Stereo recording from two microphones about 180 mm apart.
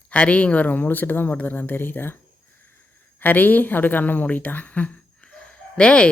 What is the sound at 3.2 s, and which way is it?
Speech, 10° left (ahead or behind).